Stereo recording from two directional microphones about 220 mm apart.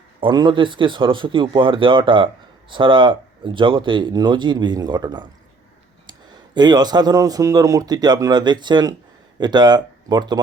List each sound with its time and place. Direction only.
0.2 s speech: 20° right (ahead or behind)